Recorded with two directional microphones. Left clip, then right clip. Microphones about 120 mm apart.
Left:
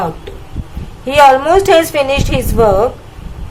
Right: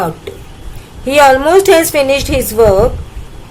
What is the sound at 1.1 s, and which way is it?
A woman's voice, 35° right (ahead or behind).